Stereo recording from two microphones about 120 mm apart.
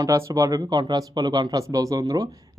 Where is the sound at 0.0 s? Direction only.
25° right (ahead or behind).